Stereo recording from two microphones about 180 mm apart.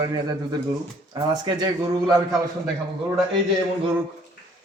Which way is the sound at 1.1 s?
20° right (ahead or behind).